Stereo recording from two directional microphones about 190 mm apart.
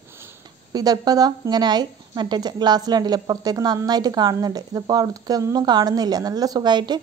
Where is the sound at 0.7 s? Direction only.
20° right (ahead or behind).